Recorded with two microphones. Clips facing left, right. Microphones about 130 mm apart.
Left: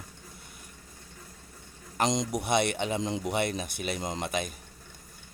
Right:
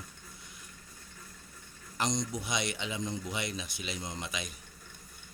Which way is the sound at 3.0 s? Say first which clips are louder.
Left 6 dB; 90° left.